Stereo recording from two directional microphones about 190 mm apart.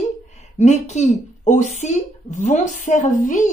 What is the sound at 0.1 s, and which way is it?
Speech, 35° left (ahead or behind).